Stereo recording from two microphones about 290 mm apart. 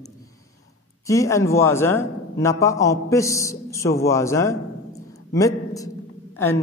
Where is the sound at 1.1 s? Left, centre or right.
Centre.